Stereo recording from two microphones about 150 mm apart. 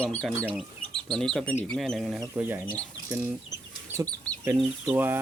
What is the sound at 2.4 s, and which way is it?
Speech, 15° right (ahead or behind).